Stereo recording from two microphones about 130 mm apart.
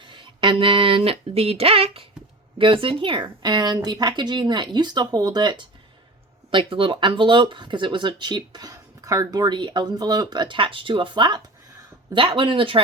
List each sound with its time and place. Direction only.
0.0 s speech: 40° right (ahead or behind)